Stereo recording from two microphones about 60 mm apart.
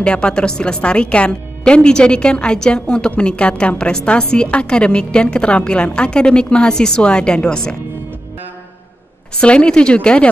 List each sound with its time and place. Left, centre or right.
0.0 s a woman's voice: centre
9.4 s a woman's voice: centre